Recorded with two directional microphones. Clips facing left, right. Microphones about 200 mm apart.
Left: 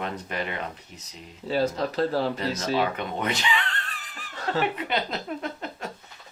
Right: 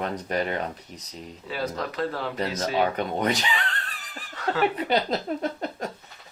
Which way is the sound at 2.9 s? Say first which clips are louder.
Right 4 dB; 40° right (ahead or behind).